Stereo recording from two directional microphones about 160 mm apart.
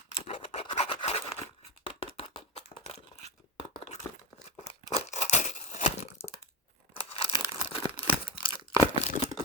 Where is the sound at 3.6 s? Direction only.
35° left (ahead or behind).